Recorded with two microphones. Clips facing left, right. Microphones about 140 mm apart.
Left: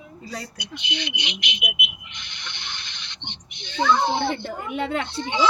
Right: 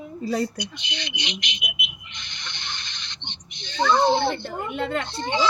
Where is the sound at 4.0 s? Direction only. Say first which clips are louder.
Right 3 dB; 10° left (ahead or behind).